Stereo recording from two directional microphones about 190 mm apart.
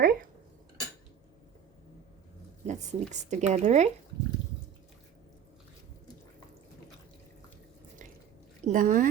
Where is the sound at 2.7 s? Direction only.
40° right (ahead or behind).